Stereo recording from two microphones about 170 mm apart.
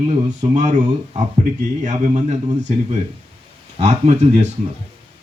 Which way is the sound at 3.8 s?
40° right (ahead or behind).